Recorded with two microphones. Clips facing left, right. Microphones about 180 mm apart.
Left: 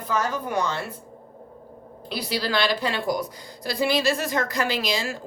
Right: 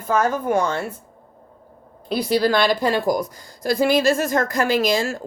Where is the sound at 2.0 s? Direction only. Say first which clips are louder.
Right 9 dB; 50° right (ahead or behind).